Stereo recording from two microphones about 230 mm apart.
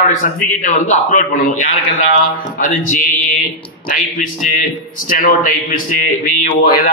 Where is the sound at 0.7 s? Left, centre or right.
Left.